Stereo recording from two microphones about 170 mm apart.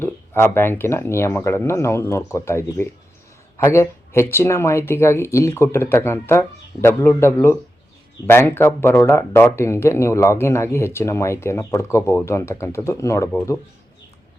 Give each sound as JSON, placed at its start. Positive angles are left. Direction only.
{"t": 0.0, "sound": "speech", "side_deg": 15}